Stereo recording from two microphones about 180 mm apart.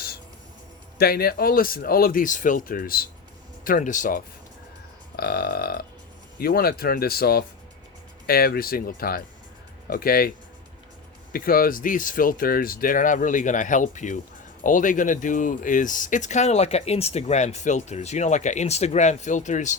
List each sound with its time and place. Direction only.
0.9 s speech: 60° left (ahead or behind)
5.1 s speech: 60° left (ahead or behind); by 19.7 s 40° left (ahead or behind)